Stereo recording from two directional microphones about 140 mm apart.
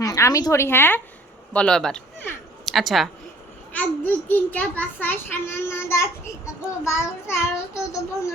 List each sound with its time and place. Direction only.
0.0 s speech: 25° left (ahead or behind); by 3.1 s centre (ahead or behind)
3.7 s a child's voice: 10° left (ahead or behind)